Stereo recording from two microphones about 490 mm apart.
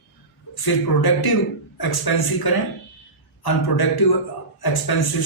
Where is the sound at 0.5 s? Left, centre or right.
Left.